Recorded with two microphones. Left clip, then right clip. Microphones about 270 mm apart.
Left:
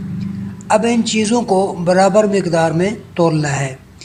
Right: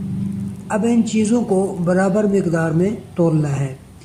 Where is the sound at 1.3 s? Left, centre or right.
Left.